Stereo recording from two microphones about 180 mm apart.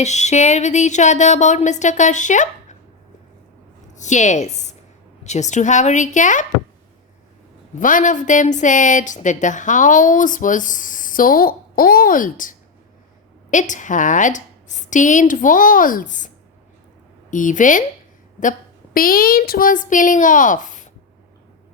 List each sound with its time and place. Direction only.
0.0 s speech: 40° left (ahead or behind)
3.9 s a woman's voice: 40° left (ahead or behind)
7.8 s a woman's voice: 45° left (ahead or behind)
17.3 s a woman's voice: 45° left (ahead or behind)
18.9 s a woman's voice: 55° left (ahead or behind)